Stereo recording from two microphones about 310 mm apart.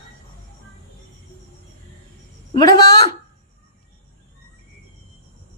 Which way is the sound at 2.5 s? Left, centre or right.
Centre.